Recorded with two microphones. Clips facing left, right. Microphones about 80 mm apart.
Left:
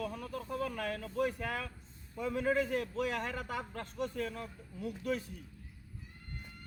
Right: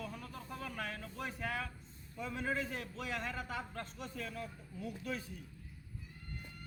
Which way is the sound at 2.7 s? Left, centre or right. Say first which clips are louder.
Left 7 dB; left.